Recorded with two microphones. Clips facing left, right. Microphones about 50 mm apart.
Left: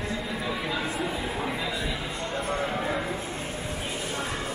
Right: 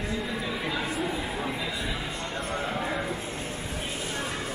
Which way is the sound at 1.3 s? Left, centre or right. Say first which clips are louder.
Left 1 dB; centre.